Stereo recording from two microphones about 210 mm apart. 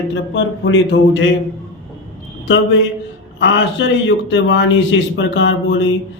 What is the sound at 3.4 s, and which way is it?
Speech, 60° left (ahead or behind).